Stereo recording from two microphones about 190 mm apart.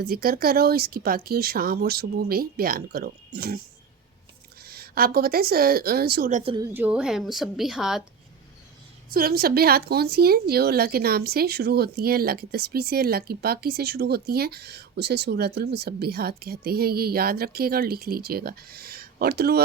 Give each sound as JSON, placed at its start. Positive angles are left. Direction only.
{"t": 0.0, "sound": "speech", "side_deg": -50}
{"t": 4.6, "sound": "speech", "side_deg": -55}
{"t": 6.4, "sound": "a woman's voice", "side_deg": -25}
{"t": 6.7, "sound": "a woman's voice", "side_deg": -5}
{"t": 9.0, "sound": "a woman's voice", "side_deg": -50}